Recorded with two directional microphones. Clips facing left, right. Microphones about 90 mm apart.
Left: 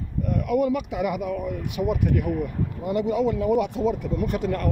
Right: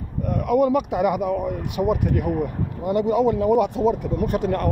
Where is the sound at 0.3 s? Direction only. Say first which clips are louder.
Right 4 dB; 45° right (ahead or behind).